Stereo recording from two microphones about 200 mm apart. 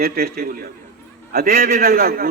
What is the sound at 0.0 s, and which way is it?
A man's voice, 50° right (ahead or behind).